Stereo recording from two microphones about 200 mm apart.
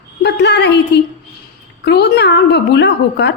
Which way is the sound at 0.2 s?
55° left (ahead or behind).